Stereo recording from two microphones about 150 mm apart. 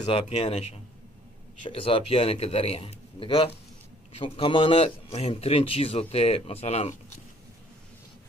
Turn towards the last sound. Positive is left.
turn(degrees=45)  # may be behind; listen again after turning